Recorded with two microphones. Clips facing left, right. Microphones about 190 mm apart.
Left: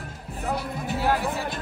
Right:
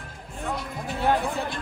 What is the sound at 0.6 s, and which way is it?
Speech, 5° left (ahead or behind).